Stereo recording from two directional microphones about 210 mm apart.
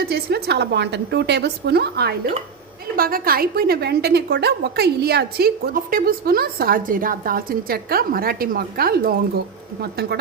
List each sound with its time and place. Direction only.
0.0 s a woman's voice: 50° right (ahead or behind)